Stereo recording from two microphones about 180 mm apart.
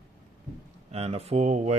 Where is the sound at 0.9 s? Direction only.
35° right (ahead or behind).